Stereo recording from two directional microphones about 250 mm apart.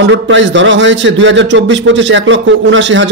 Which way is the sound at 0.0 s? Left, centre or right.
Right.